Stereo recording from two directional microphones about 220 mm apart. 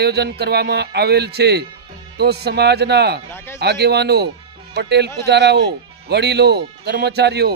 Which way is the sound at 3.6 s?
50° right (ahead or behind).